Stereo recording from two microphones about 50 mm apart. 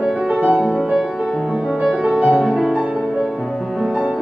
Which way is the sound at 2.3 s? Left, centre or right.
Centre.